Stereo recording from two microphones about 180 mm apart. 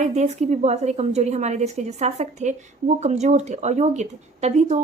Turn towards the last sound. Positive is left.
turn(degrees=-40)  # may be behind; listen again after turning